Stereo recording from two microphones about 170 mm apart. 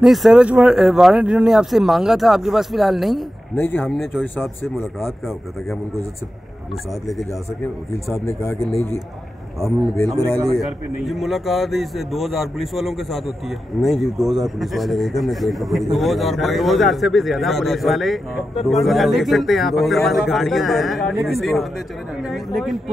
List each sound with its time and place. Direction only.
0.0 s a man's voice: centre (ahead or behind)
3.5 s speech: 10° left (ahead or behind)
7.6 s speech: 15° left (ahead or behind)
9.6 s a man's voice: centre (ahead or behind)